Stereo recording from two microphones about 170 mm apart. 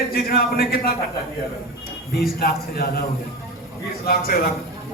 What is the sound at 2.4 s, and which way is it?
Speech, 65° left (ahead or behind).